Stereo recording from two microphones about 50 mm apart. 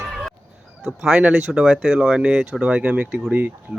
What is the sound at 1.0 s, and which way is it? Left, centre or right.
Speech, centre.